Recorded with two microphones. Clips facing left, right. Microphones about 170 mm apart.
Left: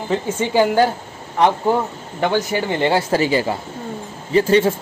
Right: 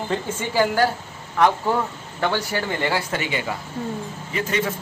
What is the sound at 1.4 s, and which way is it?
A man's voice, 20° left (ahead or behind).